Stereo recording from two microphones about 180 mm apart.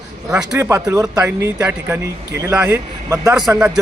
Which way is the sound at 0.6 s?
15° right (ahead or behind).